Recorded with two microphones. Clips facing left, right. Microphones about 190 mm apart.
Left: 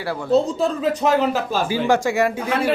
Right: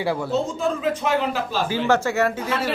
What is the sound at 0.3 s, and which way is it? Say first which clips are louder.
Speech: left 4 dB; 35° left (ahead or behind).